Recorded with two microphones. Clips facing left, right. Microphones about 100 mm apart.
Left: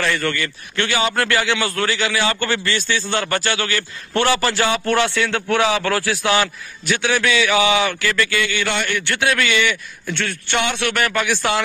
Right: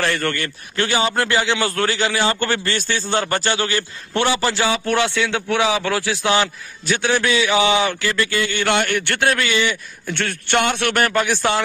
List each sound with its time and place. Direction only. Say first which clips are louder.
0.0 s a man's voice: even; 40° right (ahead or behind); by 1.6 s 25° right (ahead or behind)
1.6 s a man's voice: right 1 dB; 35° right (ahead or behind)
4.1 s a man's voice: left 1 dB; 15° right (ahead or behind); by 8.6 s 35° right (ahead or behind)
8.6 s a man's voice: right 3 dB; 55° right (ahead or behind)
9.3 s a man's voice: left 2 dB; 35° right (ahead or behind)
10.1 s speech: right 3 dB; 50° right (ahead or behind)